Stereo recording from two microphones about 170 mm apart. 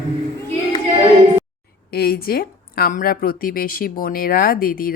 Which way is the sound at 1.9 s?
65° left (ahead or behind).